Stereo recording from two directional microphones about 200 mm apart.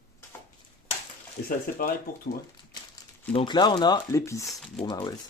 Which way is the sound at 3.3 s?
25° left (ahead or behind).